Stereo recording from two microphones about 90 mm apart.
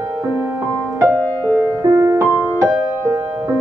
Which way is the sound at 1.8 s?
45° right (ahead or behind).